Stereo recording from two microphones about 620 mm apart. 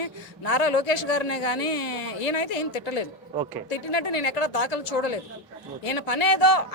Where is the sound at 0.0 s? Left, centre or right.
Left.